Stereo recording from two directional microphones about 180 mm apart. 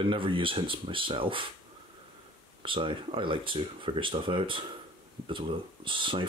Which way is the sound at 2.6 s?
30° right (ahead or behind).